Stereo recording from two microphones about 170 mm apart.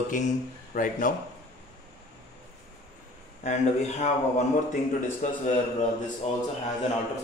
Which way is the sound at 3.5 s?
40° left (ahead or behind).